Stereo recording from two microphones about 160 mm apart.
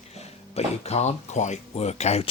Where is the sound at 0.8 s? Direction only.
45° left (ahead or behind).